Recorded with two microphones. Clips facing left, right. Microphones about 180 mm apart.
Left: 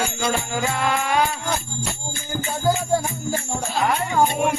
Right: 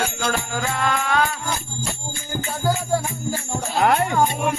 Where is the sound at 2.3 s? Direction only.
15° right (ahead or behind).